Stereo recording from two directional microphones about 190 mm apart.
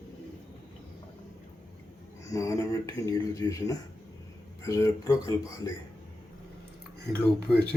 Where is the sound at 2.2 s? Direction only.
15° left (ahead or behind).